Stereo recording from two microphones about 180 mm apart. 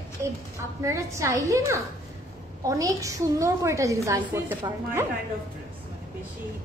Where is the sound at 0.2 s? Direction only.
15° right (ahead or behind).